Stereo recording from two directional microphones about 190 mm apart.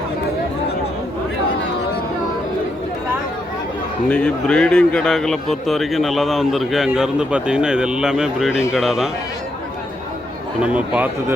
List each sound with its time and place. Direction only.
4.1 s a man's voice: 5° left (ahead or behind)
10.6 s speech: 5° right (ahead or behind)